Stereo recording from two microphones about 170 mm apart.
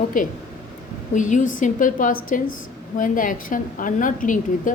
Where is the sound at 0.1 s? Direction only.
50° left (ahead or behind).